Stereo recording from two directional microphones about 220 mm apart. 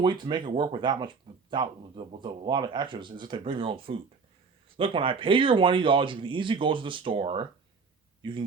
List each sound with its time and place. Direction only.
0.0 s speech: 20° right (ahead or behind)